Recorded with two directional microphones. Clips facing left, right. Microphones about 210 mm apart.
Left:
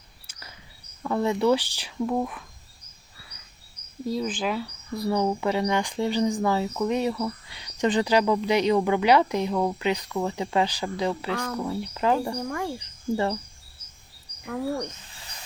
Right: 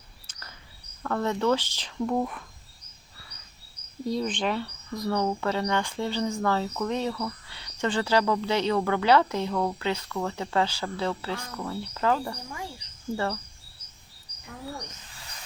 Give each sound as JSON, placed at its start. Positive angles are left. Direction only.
{"t": 0.3, "sound": "a sound", "side_deg": 10}
{"t": 1.0, "sound": "speech", "side_deg": 10}
{"t": 4.0, "sound": "speech", "side_deg": 0}
{"t": 12.5, "sound": "speech", "side_deg": 55}
{"t": 13.1, "sound": "speech", "side_deg": 15}
{"t": 14.4, "sound": "speech", "side_deg": 80}